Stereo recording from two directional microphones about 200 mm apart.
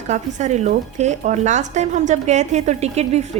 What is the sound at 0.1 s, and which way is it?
Speech, 35° right (ahead or behind).